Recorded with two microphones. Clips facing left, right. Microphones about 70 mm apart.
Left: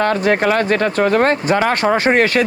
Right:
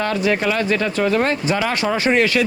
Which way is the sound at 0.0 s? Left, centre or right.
Left.